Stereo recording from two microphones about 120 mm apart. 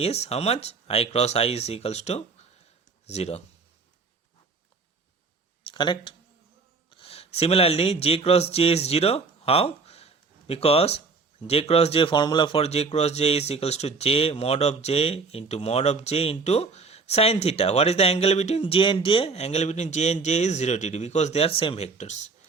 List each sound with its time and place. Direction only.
0.0 s speech: 60° left (ahead or behind)
5.6 s speech: 40° left (ahead or behind)
6.9 s speech: 55° left (ahead or behind)
12.5 s speech: 60° left (ahead or behind)
18.6 s speech: 45° left (ahead or behind)
21.9 s a man's voice: 80° left